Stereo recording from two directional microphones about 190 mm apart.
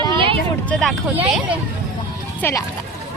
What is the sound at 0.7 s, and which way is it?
Speech, centre (ahead or behind).